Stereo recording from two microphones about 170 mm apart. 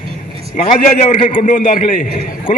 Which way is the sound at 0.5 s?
40° left (ahead or behind).